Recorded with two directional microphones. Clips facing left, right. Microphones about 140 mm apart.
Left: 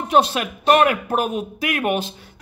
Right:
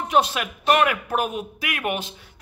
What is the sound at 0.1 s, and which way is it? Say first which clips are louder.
Speech: left 4 dB; 30° left (ahead or behind).